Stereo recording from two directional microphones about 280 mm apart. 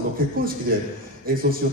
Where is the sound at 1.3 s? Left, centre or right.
Right.